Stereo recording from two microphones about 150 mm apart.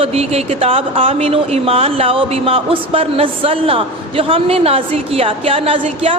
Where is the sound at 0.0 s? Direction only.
45° right (ahead or behind).